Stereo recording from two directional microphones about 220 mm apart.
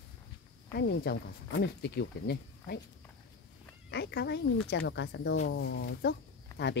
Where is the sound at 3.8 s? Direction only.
50° left (ahead or behind).